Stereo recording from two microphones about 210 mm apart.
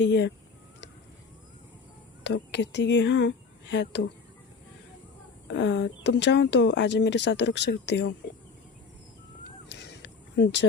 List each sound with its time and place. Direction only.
0.0 s speech: 55° left (ahead or behind)
2.2 s speech: 55° left (ahead or behind)
5.5 s speech: 60° left (ahead or behind)
9.6 s crow: 55° left (ahead or behind)